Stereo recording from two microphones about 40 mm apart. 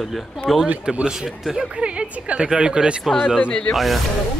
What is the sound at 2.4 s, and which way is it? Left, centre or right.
Speech, centre.